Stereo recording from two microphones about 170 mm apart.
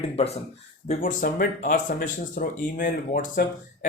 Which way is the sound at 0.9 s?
55° left (ahead or behind).